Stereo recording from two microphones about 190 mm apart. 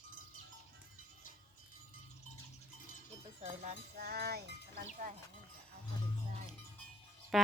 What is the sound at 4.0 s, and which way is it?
Speech, 55° right (ahead or behind).